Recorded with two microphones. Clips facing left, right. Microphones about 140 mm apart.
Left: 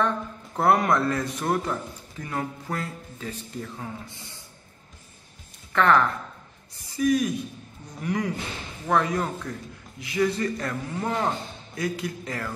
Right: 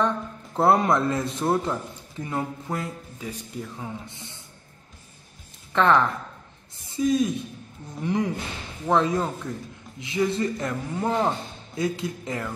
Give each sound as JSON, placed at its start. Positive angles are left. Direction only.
{"t": 0.6, "sound": "a man's voice", "side_deg": -25}
{"t": 5.7, "sound": "a woman's voice", "side_deg": -20}